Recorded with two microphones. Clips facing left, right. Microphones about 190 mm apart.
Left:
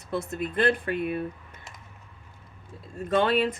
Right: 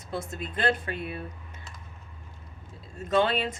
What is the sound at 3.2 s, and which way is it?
Speech, 55° left (ahead or behind).